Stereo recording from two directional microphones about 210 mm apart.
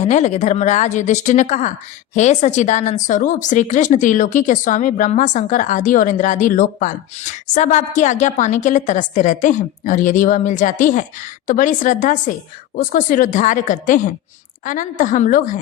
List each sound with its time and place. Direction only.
0.0 s speech: 35° left (ahead or behind)